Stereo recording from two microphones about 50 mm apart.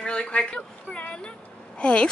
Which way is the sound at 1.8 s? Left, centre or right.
Left.